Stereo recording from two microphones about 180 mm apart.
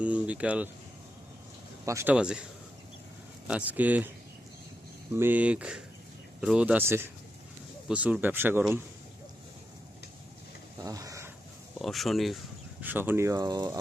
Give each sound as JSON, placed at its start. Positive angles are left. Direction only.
{"t": 0.0, "sound": "speech", "side_deg": -5}
{"t": 1.8, "sound": "speech", "side_deg": -15}
{"t": 2.1, "sound": "speech", "side_deg": -5}
{"t": 3.4, "sound": "speech", "side_deg": -10}
{"t": 5.1, "sound": "speech", "side_deg": -10}
{"t": 10.8, "sound": "a sound", "side_deg": -20}
{"t": 11.8, "sound": "speech", "side_deg": 0}
{"t": 12.8, "sound": "speech", "side_deg": -10}